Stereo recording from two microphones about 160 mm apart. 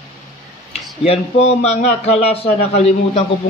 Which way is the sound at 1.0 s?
40° left (ahead or behind).